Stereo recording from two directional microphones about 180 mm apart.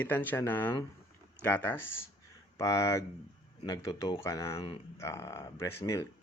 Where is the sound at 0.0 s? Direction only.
10° left (ahead or behind).